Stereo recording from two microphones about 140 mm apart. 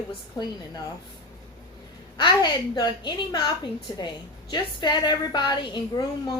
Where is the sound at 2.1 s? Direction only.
35° left (ahead or behind).